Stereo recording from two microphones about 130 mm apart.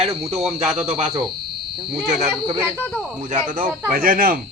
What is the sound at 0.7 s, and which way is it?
Speech, 55° right (ahead or behind).